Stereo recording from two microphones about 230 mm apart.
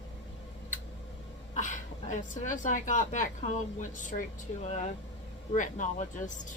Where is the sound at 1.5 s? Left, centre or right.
Left.